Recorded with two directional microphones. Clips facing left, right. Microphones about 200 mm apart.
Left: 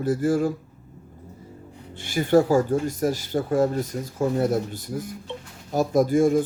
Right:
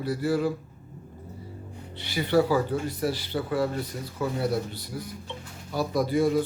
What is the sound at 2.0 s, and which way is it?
Speech, 45° left (ahead or behind).